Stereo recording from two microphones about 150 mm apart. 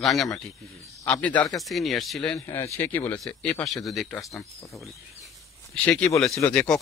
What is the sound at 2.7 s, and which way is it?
Speech, 15° left (ahead or behind).